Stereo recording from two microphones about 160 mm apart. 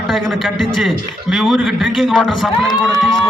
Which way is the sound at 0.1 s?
Centre (ahead or behind).